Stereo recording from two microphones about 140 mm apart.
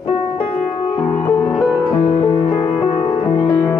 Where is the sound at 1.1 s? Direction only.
15° left (ahead or behind).